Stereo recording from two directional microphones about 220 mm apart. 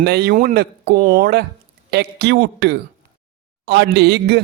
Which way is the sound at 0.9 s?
35° right (ahead or behind).